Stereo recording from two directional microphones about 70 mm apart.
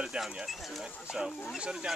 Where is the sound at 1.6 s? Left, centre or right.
Centre.